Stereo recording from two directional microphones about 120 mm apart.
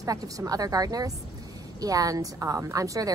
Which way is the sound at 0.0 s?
30° right (ahead or behind).